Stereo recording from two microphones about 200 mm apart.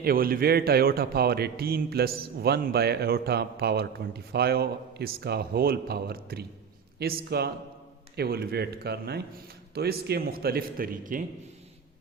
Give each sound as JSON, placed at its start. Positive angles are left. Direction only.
{"t": 0.0, "sound": "a man's voice", "side_deg": -45}